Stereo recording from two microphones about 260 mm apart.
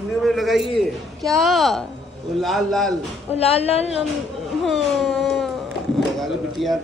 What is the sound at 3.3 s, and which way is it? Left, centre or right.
Speech, left.